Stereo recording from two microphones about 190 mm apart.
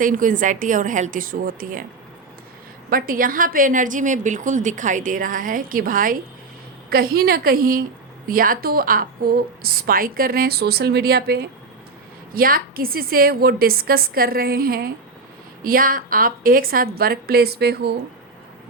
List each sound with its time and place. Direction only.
0.0 s a woman's voice: 45° right (ahead or behind)
2.9 s a woman's voice: 45° right (ahead or behind)